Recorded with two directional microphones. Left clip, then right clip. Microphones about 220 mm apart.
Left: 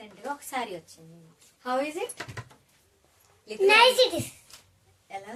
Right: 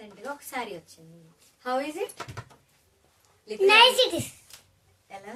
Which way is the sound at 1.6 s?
Centre (ahead or behind).